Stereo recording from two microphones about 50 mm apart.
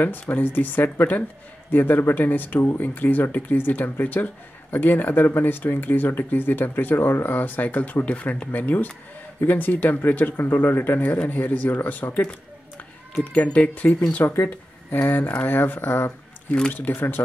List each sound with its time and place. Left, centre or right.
0.0 s speech: left
13.2 s speech: left
14.2 s speech: left
14.9 s speech: left